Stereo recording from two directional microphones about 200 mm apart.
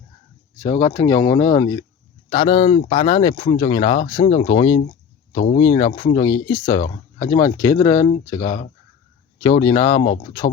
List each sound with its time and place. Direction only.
0.6 s speech: 15° left (ahead or behind)